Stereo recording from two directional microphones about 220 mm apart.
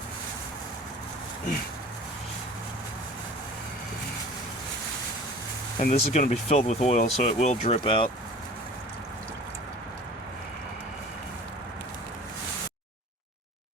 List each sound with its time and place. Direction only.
5.8 s speech: 40° left (ahead or behind)